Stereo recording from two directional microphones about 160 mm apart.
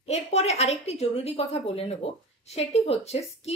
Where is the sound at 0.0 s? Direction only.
40° left (ahead or behind).